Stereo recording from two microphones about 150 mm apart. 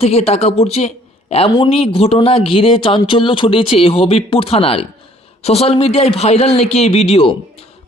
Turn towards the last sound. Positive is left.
turn(degrees=40)  # may be behind; listen again after turning